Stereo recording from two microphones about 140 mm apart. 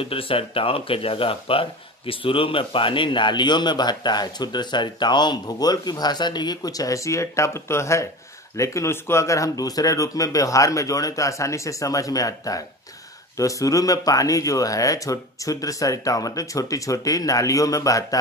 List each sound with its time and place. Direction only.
0.0 s speech: 40° left (ahead or behind); by 18.0 s 25° left (ahead or behind)